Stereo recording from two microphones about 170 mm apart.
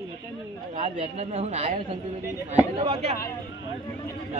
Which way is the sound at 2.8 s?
35° right (ahead or behind).